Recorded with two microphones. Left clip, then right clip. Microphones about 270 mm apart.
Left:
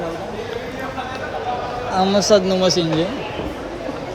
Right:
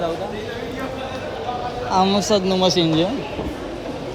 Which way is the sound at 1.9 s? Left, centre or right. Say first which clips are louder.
Left 3 dB; centre.